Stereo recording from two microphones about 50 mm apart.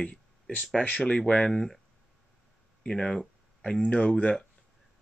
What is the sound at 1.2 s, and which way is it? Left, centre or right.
Speech, left.